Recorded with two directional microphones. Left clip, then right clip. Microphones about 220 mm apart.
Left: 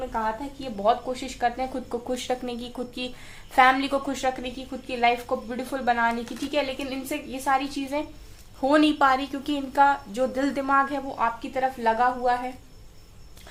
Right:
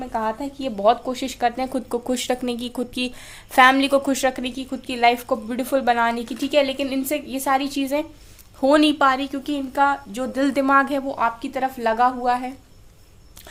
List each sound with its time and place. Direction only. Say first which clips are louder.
0.1 s a woman's voice: right 3 dB; 50° right (ahead or behind)
8.6 s a woman's voice: right 4 dB; 35° right (ahead or behind)